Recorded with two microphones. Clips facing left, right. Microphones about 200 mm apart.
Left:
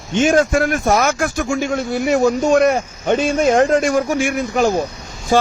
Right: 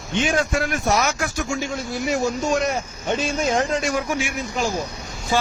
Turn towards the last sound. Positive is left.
turn(degrees=45)  # may be behind; listen again after turning